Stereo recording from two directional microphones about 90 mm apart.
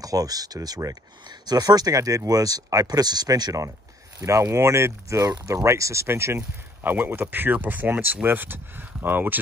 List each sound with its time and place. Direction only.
0.0 s speech: 45° right (ahead or behind)
4.2 s speech: 35° right (ahead or behind)